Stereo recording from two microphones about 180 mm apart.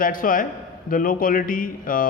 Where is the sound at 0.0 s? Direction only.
50° left (ahead or behind).